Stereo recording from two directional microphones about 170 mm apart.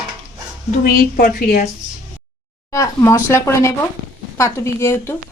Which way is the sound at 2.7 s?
20° left (ahead or behind).